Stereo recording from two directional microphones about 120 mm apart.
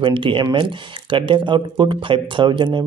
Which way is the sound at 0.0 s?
45° right (ahead or behind).